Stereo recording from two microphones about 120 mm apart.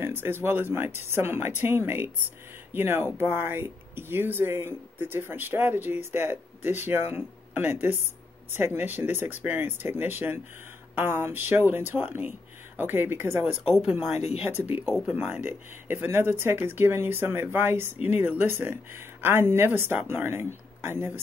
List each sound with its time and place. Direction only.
0.0 s speech: 20° right (ahead or behind)
13.7 s speech: 5° right (ahead or behind); by 21.2 s 20° right (ahead or behind)